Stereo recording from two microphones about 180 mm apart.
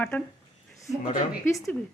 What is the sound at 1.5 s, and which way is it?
Speech, 15° left (ahead or behind).